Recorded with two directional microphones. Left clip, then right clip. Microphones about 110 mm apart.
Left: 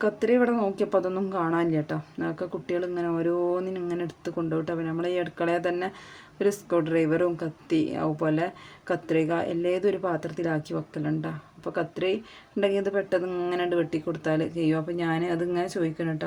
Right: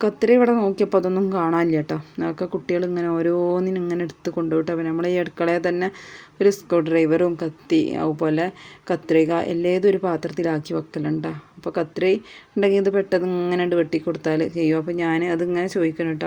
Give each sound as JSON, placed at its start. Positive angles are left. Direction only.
{"t": 0.0, "sound": "a woman's voice", "side_deg": -35}